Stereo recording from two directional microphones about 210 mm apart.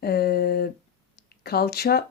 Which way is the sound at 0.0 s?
50° left (ahead or behind).